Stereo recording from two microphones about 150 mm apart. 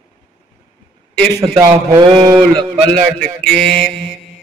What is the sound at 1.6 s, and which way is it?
Mantra, 25° right (ahead or behind).